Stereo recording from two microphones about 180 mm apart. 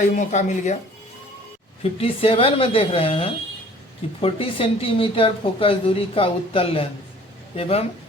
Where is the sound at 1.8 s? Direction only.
30° left (ahead or behind).